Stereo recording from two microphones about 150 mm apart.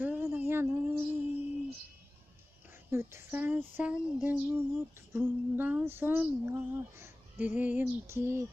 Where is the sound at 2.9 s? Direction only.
15° right (ahead or behind).